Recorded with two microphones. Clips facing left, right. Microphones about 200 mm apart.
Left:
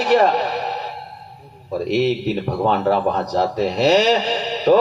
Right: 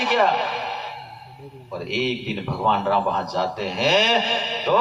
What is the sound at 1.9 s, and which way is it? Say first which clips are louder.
A man's voice: left 6 dB; 40° left (ahead or behind).